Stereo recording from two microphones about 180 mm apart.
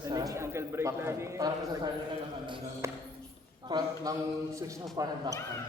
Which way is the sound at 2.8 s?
15° right (ahead or behind).